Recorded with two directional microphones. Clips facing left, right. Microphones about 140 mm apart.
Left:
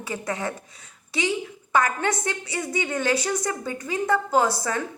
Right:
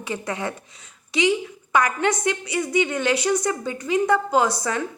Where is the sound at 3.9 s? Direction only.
20° right (ahead or behind).